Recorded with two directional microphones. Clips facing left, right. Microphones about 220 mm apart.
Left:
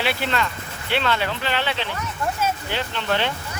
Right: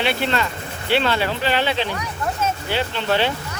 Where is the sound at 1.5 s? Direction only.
15° right (ahead or behind).